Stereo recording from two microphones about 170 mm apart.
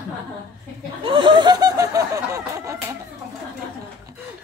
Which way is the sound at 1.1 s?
30° right (ahead or behind).